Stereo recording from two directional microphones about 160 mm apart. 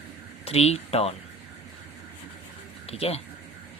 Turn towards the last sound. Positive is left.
turn(degrees=40)  # may be behind; listen again after turning